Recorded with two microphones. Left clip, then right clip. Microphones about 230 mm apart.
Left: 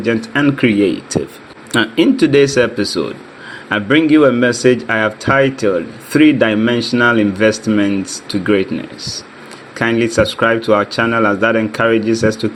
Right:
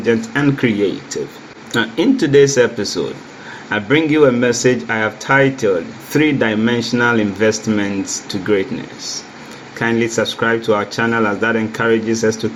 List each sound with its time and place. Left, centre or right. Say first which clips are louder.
0.0 s speech: left 1 dB; left
9.7 s speech: left 3 dB; left